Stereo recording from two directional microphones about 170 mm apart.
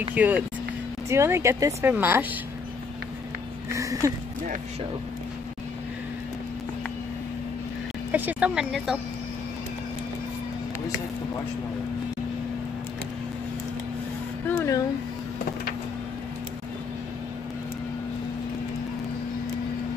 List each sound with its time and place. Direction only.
0.1 s speech: 10° right (ahead or behind)
3.7 s speech: 20° right (ahead or behind)
8.1 s speech: 10° right (ahead or behind)
14.5 s speech: 15° left (ahead or behind)